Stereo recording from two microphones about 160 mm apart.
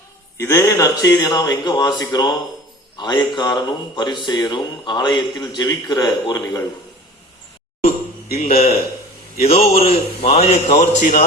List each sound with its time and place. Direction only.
0.3 s speech: 20° left (ahead or behind)
8.4 s a man's voice: 45° left (ahead or behind)